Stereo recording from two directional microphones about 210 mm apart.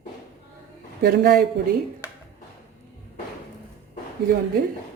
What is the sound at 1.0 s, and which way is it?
Speech, 45° right (ahead or behind).